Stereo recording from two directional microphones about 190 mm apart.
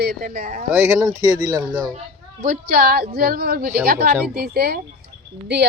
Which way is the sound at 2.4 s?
50° right (ahead or behind).